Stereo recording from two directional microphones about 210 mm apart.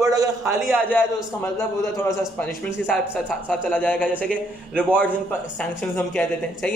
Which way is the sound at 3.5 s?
5° left (ahead or behind).